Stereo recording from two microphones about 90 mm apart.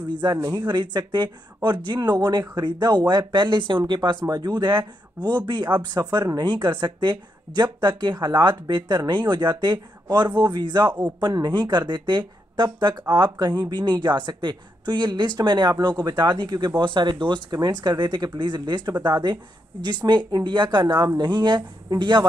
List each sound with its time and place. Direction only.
0.2 s speech: 50° right (ahead or behind)
10.9 s a man's voice: 15° right (ahead or behind)
11.1 s speech: 50° right (ahead or behind)